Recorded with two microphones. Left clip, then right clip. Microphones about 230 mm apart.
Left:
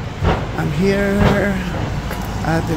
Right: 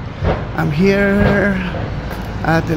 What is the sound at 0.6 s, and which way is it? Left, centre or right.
Speech, centre.